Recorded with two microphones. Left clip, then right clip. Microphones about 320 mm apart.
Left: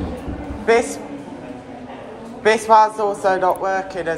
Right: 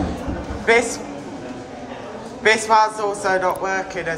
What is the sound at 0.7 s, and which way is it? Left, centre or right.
Speech, centre.